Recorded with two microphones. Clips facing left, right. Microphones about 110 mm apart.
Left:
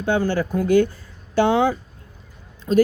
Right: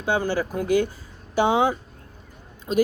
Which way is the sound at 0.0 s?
10° right (ahead or behind).